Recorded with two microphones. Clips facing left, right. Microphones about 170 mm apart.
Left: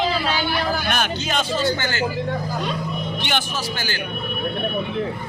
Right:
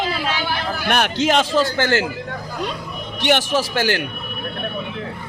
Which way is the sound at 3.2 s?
85° right.